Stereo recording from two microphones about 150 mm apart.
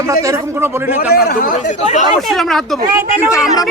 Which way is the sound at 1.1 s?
80° left.